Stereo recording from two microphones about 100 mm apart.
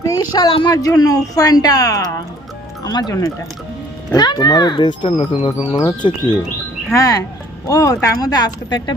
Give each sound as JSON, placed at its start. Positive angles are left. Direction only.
{"t": 0.3, "sound": "speech", "side_deg": 50}
{"t": 0.8, "sound": "speech", "side_deg": 35}
{"t": 4.1, "sound": "speech", "side_deg": 45}
{"t": 5.0, "sound": "speech", "side_deg": 60}
{"t": 6.9, "sound": "speech", "side_deg": 35}